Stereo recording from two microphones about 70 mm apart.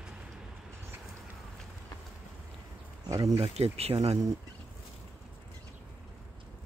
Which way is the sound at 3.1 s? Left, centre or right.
Right.